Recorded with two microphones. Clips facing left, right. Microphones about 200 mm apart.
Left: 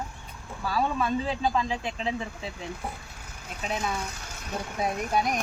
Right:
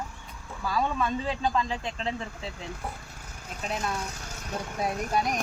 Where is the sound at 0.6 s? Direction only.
5° left (ahead or behind).